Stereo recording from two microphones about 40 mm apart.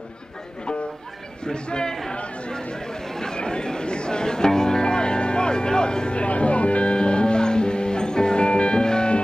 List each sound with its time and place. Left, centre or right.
1.4 s a man's voice: left
2.6 s chatter: centre